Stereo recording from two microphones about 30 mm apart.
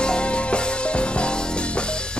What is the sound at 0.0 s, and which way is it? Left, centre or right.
Music, left.